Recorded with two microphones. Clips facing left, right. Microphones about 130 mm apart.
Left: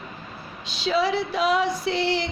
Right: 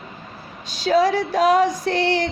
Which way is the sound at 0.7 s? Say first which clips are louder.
Right 5 dB; 45° right (ahead or behind).